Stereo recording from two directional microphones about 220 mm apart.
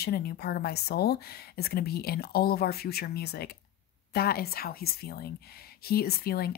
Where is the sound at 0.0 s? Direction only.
45° left (ahead or behind).